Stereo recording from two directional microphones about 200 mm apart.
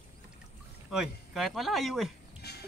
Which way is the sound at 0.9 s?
Centre (ahead or behind).